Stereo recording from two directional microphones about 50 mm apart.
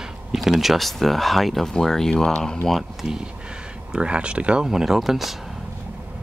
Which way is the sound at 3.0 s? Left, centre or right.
Centre.